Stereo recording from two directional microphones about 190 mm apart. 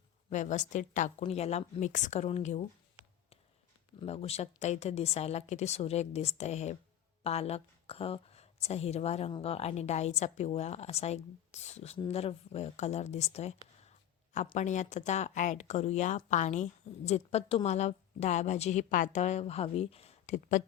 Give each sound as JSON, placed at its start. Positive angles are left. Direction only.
{"t": 0.3, "sound": "speech", "side_deg": 40}
{"t": 4.0, "sound": "speech", "side_deg": 30}